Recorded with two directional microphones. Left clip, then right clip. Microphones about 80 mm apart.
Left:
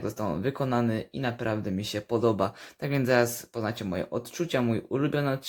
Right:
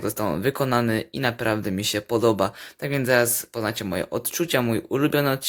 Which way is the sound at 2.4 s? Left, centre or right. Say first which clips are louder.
Right 5 dB; centre.